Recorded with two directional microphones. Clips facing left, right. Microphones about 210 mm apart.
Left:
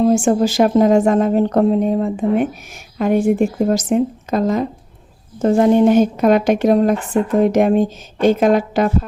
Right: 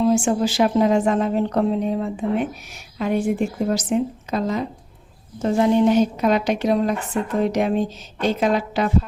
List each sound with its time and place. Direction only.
0.0 s a woman's voice: 45° left (ahead or behind)